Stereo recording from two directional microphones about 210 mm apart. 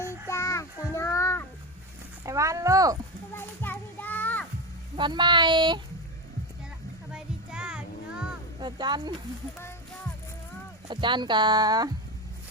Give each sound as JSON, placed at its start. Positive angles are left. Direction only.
{"t": 0.0, "sound": "child singing", "side_deg": 15}
{"t": 2.2, "sound": "a sound", "side_deg": -15}
{"t": 3.3, "sound": "children playing", "side_deg": 10}
{"t": 4.9, "sound": "speech", "side_deg": -20}
{"t": 7.1, "sound": "child singing", "side_deg": -5}
{"t": 8.6, "sound": "speech", "side_deg": -20}
{"t": 10.8, "sound": "speech", "side_deg": -20}